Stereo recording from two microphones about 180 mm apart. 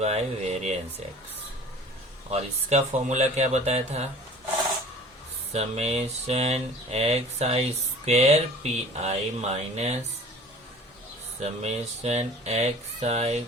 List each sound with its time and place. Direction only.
0.0 s speech: 35° right (ahead or behind)
2.3 s speech: 40° right (ahead or behind)
5.5 s speech: 35° right (ahead or behind)
11.3 s speech: 35° right (ahead or behind)